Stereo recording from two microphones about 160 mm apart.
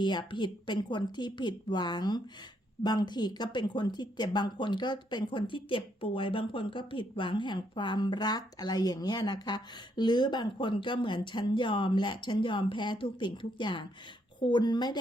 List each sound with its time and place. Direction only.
0.0 s speech: 30° left (ahead or behind)